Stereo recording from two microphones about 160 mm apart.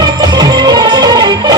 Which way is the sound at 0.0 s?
25° right (ahead or behind).